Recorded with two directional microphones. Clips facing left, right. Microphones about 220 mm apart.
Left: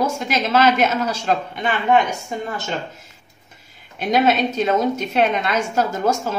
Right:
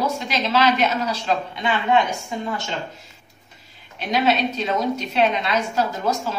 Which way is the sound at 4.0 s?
50° left (ahead or behind).